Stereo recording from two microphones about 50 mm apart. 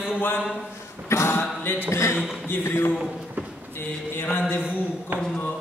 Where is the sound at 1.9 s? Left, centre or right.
Left.